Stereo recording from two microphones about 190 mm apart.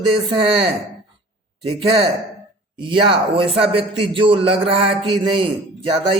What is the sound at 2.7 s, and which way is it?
Speech, 25° right (ahead or behind).